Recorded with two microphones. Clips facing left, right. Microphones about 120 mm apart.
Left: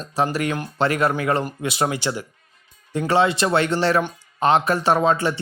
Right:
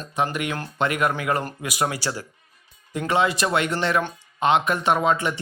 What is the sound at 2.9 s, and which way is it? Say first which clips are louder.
Speech: left 3 dB; 30° left (ahead or behind).